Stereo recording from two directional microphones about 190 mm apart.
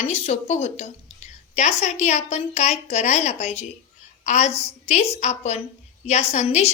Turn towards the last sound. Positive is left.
turn(degrees=35)  # may be behind; listen again after turning